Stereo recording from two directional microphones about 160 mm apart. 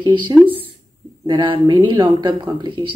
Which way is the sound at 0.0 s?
30° right (ahead or behind).